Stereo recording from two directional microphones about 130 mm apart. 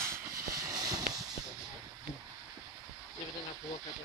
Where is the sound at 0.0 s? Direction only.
20° right (ahead or behind).